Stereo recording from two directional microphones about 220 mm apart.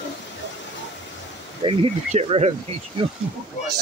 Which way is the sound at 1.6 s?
25° right (ahead or behind).